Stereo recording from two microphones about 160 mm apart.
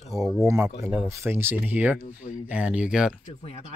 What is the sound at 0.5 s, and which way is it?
Speech, 15° right (ahead or behind).